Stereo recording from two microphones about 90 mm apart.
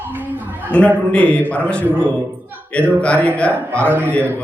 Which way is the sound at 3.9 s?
25° right (ahead or behind).